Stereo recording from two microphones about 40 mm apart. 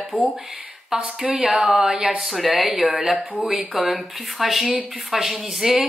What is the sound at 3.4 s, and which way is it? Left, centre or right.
Speech, right.